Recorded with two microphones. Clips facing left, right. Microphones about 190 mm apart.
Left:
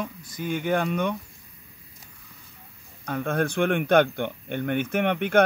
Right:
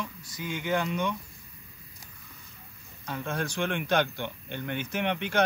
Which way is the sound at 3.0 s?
55° left (ahead or behind).